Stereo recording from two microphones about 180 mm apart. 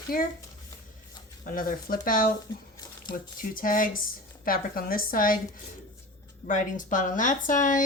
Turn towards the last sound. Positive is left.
turn(degrees=45)  # may be behind; listen again after turning